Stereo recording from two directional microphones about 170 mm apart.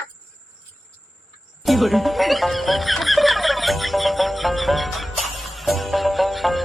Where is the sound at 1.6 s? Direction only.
Centre (ahead or behind).